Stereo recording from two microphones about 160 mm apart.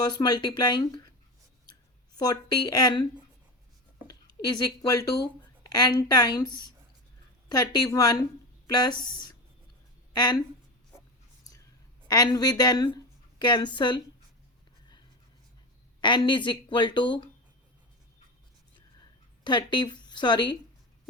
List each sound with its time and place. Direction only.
0.0 s a woman's voice: 25° left (ahead or behind)
2.1 s a woman's voice: 25° left (ahead or behind)
4.0 s a woman's voice: 25° left (ahead or behind)
12.0 s a woman's voice: 25° left (ahead or behind)
16.0 s a woman's voice: 30° left (ahead or behind)
19.5 s a woman's voice: 30° left (ahead or behind)